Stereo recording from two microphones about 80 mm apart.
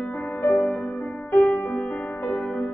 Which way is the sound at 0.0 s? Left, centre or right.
Centre.